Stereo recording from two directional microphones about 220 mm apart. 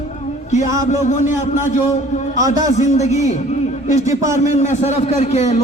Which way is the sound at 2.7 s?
30° left (ahead or behind).